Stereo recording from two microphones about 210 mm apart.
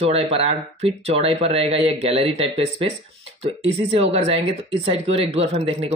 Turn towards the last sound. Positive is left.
turn(degrees=-30)  # may be behind; listen again after turning